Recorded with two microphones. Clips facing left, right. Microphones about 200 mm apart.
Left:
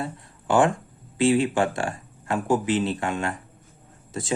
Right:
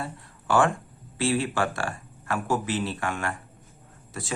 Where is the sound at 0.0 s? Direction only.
20° left (ahead or behind).